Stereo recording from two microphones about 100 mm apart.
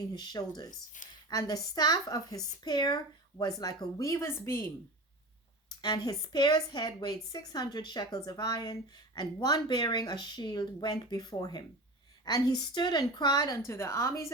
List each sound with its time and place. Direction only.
0.1 s a woman's voice: 45° left (ahead or behind); by 4.6 s 25° left (ahead or behind)
5.6 s a woman's voice: 45° left (ahead or behind)
13.7 s a woman's voice: 30° left (ahead or behind)